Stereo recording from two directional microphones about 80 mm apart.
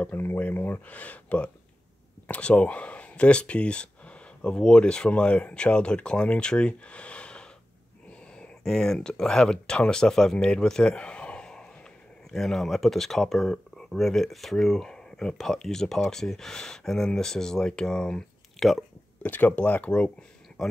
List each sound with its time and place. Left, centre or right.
0.1 s speech: left; by 18.9 s centre
19.2 s speech: left